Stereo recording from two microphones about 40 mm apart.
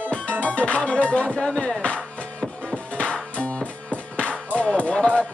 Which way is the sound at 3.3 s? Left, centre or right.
Left.